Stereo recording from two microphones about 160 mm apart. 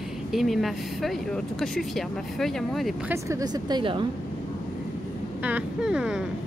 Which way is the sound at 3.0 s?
20° right (ahead or behind).